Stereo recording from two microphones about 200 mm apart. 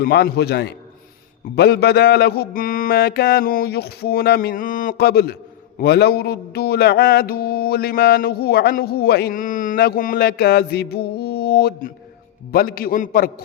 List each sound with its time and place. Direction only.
0.0 s mantra: 50° left (ahead or behind)